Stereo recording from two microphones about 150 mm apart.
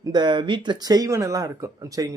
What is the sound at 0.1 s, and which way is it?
Speech, 30° right (ahead or behind).